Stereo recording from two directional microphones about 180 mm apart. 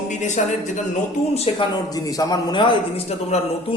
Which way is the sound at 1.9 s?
20° left (ahead or behind).